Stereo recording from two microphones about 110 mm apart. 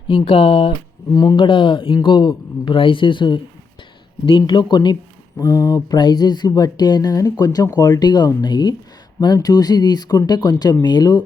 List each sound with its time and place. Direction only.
0.1 s speech: 50° left (ahead or behind)
1.1 s speech: 35° left (ahead or behind)
1.4 s speech: 50° left (ahead or behind)
5.4 s speech: 30° left (ahead or behind)